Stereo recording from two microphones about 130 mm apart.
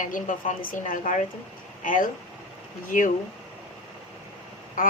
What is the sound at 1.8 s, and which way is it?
Speech, 90° left.